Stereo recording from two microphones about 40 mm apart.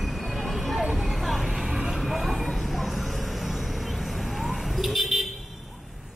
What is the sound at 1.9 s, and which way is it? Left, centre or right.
Vehicle, centre.